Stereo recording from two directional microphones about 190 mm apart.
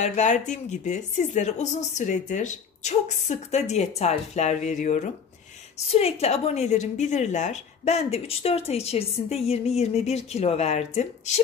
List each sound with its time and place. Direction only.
0.0 s a woman's voice: 40° left (ahead or behind)